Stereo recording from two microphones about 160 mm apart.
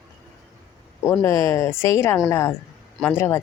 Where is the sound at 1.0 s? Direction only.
15° left (ahead or behind).